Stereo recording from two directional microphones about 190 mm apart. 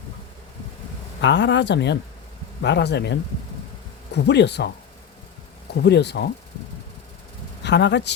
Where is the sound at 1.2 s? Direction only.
70° left (ahead or behind).